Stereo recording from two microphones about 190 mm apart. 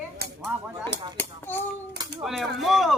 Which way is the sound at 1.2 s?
10° left (ahead or behind).